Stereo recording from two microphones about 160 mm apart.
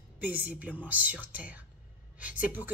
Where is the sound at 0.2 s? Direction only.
10° right (ahead or behind).